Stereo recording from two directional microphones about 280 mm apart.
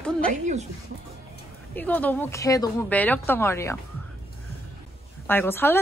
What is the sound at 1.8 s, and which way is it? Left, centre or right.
A woman's voice, centre.